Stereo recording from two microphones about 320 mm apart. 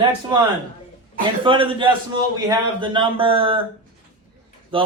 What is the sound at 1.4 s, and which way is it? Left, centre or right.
A man's voice, centre.